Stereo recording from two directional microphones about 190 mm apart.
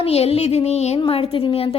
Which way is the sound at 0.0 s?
30° left (ahead or behind).